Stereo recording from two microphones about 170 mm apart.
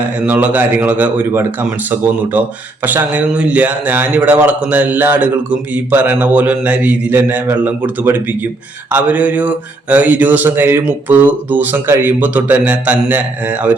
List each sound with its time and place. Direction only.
0.2 s speech: 10° right (ahead or behind)